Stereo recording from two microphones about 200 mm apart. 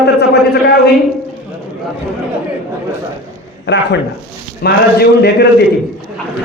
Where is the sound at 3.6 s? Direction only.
60° left (ahead or behind).